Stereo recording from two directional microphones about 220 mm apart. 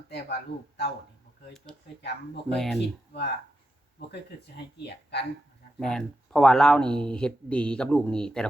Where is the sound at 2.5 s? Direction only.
Centre (ahead or behind).